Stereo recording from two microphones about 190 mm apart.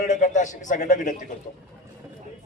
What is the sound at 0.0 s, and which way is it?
A man's voice, 40° left (ahead or behind).